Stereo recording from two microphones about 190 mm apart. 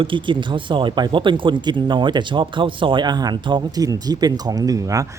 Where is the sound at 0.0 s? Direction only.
25° right (ahead or behind).